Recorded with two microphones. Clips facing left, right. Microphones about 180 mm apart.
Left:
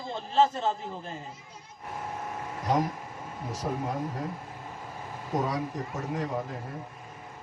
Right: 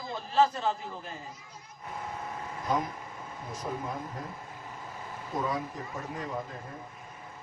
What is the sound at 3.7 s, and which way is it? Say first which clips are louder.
Speech: left 3 dB; 55° left (ahead or behind).